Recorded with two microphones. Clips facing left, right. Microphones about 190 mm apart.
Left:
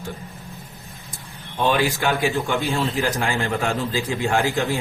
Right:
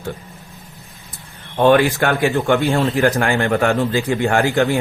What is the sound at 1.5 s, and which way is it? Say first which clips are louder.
Speech: right 8 dB; 60° right (ahead or behind).